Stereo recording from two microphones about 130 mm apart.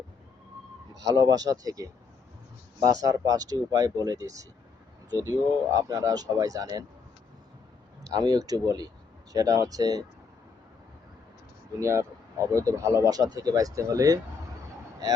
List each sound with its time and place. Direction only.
1.0 s speech: 30° right (ahead or behind)
8.0 s speech: 30° right (ahead or behind)
11.8 s speech: 20° right (ahead or behind)